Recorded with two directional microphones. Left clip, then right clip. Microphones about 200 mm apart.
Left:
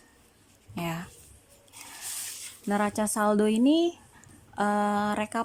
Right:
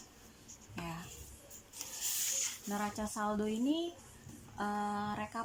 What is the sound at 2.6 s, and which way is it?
Speech, 50° left (ahead or behind).